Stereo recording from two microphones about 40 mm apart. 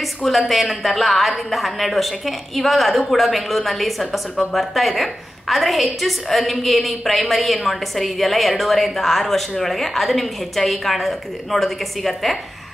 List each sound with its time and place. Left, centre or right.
0.0 s a woman's voice: centre